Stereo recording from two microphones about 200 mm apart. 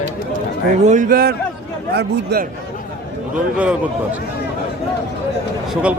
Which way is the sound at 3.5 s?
5° right (ahead or behind).